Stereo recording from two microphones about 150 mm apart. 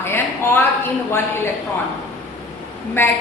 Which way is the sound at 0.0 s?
15° left (ahead or behind).